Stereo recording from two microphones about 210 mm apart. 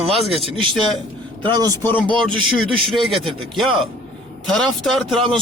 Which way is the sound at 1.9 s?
5° left (ahead or behind).